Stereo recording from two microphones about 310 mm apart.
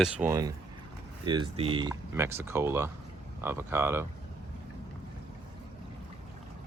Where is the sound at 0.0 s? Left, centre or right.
Centre.